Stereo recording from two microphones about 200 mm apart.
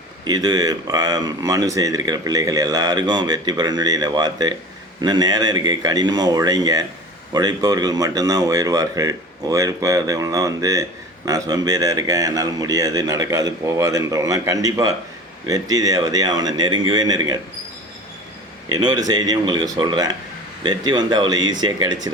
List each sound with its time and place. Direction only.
0.3 s speech: 20° right (ahead or behind)
18.7 s speech: 20° right (ahead or behind)